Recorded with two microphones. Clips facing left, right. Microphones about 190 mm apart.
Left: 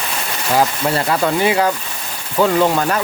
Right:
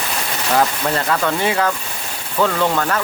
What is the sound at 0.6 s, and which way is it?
Speech, 10° left (ahead or behind).